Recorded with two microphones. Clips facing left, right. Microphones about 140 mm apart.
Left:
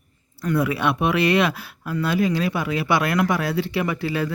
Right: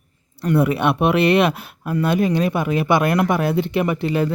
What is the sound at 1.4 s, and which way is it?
Speech, 20° right (ahead or behind).